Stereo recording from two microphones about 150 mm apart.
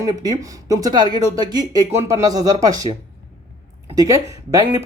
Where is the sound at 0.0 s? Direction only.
25° right (ahead or behind).